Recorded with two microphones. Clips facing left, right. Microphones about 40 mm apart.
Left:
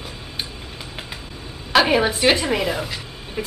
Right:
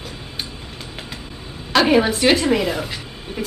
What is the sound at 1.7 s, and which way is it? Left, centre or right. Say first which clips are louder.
A woman's voice: right 1 dB; centre.